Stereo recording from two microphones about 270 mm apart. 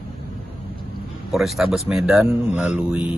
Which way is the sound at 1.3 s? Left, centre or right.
Centre.